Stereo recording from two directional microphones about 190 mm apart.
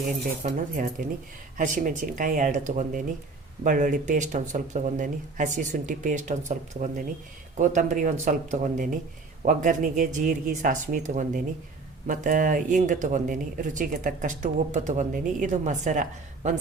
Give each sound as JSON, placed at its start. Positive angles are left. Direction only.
{"t": 0.4, "sound": "speech", "side_deg": -45}